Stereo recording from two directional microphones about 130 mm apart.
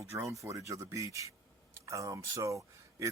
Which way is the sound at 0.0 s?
20° right (ahead or behind).